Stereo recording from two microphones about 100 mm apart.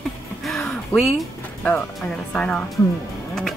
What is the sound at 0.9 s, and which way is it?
Speech, centre (ahead or behind).